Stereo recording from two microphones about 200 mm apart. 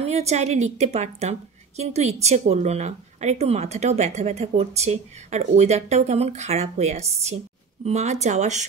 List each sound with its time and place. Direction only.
0.0 s a woman's voice: 30° right (ahead or behind)